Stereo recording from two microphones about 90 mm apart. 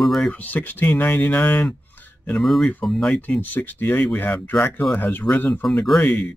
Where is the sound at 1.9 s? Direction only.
20° left (ahead or behind).